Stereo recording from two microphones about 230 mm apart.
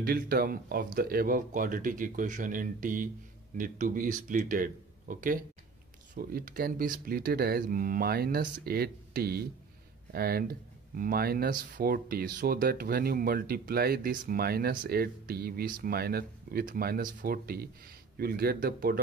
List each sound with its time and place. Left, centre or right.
0.0 s speech: right